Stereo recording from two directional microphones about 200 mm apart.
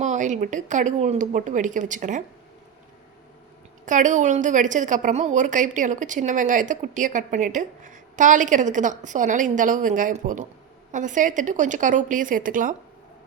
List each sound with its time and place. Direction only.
0.0 s a woman's voice: 35° right (ahead or behind)
3.8 s a woman's voice: 40° right (ahead or behind)